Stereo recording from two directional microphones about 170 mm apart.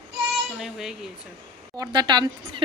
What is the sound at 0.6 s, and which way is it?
Speech, centre (ahead or behind).